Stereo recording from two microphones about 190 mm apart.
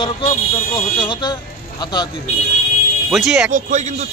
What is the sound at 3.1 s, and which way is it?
Speech, centre (ahead or behind).